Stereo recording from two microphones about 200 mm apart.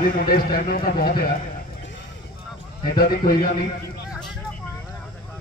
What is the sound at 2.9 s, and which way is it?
Speech, 45° left (ahead or behind).